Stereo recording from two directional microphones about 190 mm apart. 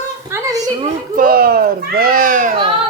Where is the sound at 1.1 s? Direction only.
50° right (ahead or behind).